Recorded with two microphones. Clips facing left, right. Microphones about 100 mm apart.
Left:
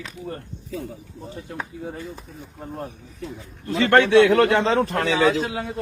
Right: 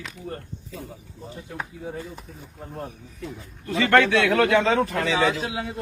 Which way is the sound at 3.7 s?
35° left (ahead or behind).